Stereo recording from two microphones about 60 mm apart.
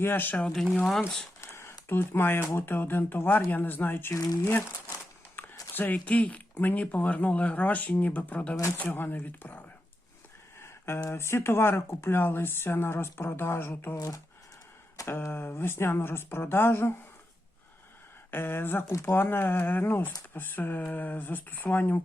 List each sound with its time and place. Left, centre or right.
0.0 s speech: left
0.3 s speech: centre
1.4 s a sound: left
1.9 s speech: left
5.4 s a sound: left
5.7 s speech: left
8.9 s speech: left
10.6 s a sound: left
11.1 s speech: left
15.0 s speech: left
18.3 s speech: left